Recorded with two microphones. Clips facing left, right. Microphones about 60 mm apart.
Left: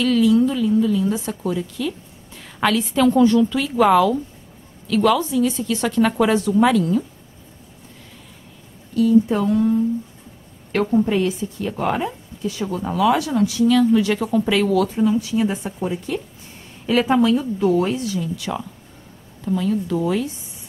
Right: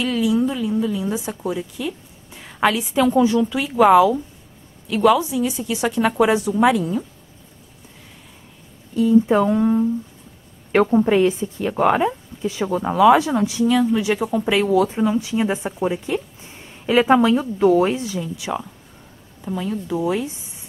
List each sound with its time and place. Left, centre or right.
0.0 s a woman's voice: centre
8.9 s a woman's voice: right
10.9 s a woman's voice: right; by 20.2 s centre